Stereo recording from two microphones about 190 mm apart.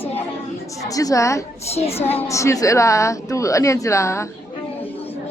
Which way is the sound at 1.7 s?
35° left (ahead or behind).